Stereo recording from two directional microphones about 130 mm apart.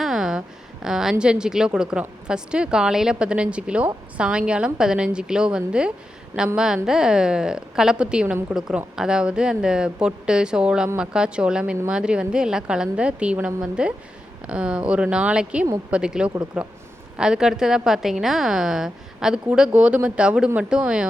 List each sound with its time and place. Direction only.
0.0 s a sound: 5° right (ahead or behind)
1.2 s speech: 5° right (ahead or behind)
6.3 s a woman's voice: 20° right (ahead or behind)
6.8 s a woman's voice: 5° right (ahead or behind)